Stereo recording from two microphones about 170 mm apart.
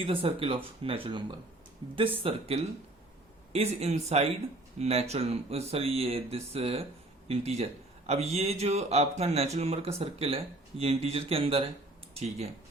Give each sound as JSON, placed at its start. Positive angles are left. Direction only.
{"t": 0.0, "sound": "a man's voice", "side_deg": -35}